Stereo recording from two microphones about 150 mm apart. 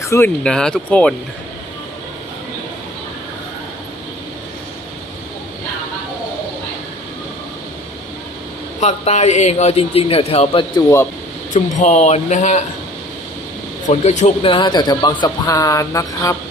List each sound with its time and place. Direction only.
0.0 s speech: 20° left (ahead or behind)
0.4 s speech: 5° left (ahead or behind)
8.8 s a man's voice: 50° left (ahead or behind)
11.5 s a man's voice: 50° left (ahead or behind)
13.8 s a man's voice: 50° left (ahead or behind)
14.4 s speech: 35° left (ahead or behind)